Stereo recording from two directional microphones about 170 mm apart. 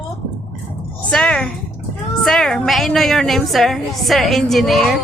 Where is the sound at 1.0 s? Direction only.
5° left (ahead or behind).